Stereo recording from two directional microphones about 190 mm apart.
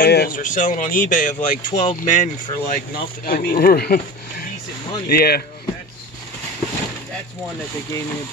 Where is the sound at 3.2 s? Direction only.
50° left (ahead or behind).